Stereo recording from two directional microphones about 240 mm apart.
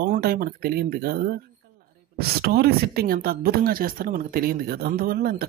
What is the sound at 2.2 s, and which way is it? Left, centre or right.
Speech, right.